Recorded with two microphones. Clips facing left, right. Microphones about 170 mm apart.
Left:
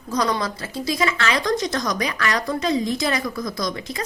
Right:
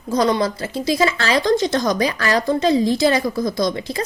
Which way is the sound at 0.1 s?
25° right (ahead or behind).